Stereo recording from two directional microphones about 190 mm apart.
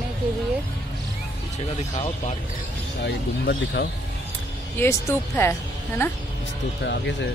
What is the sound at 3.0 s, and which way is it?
Speech, 65° left (ahead or behind).